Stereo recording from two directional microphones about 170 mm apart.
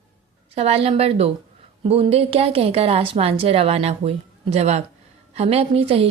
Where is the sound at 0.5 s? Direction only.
35° right (ahead or behind).